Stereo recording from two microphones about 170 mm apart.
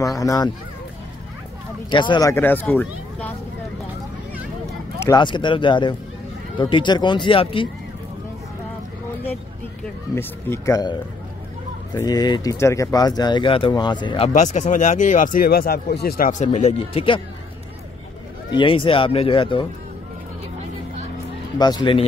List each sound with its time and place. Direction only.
0.0 s speech: 20° left (ahead or behind)
1.9 s speech: 25° left (ahead or behind)
2.3 s speech: 10° left (ahead or behind)
5.0 s speech: 25° left (ahead or behind)
10.1 s speech: 15° left (ahead or behind)
14.3 s speech: 45° left (ahead or behind)
18.5 s speech: 30° left (ahead or behind)
21.5 s speech: 25° left (ahead or behind)